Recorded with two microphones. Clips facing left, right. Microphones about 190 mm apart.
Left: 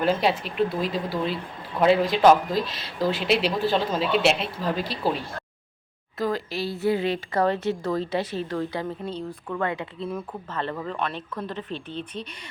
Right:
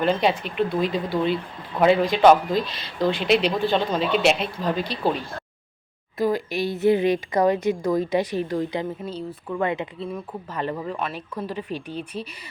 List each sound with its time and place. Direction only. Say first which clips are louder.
0.0 s speech: right 1 dB; 5° left (ahead or behind)
6.1 s speech: right 4 dB; 15° right (ahead or behind)
10.0 s speech: even; centre (ahead or behind)
10.5 s speech: right 2 dB; 10° right (ahead or behind)